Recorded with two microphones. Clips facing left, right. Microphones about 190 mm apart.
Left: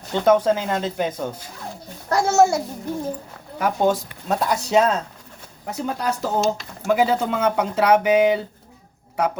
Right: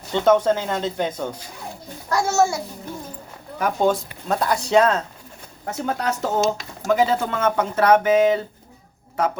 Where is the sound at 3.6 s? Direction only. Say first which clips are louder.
Even; 5° left (ahead or behind).